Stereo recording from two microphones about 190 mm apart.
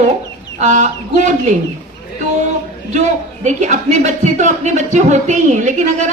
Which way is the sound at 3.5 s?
40° right (ahead or behind).